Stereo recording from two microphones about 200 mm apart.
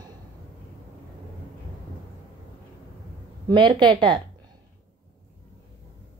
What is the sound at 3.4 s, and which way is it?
Speech, 25° right (ahead or behind).